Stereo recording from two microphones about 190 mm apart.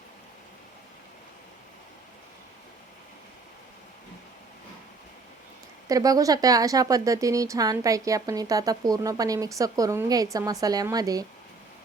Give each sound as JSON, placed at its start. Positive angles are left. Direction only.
{"t": 5.9, "sound": "speech", "side_deg": -20}